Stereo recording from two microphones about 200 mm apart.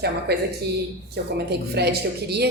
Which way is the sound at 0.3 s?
55° right (ahead or behind).